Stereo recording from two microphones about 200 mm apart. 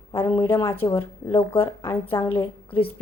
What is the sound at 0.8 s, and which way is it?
A woman's voice, 25° left (ahead or behind).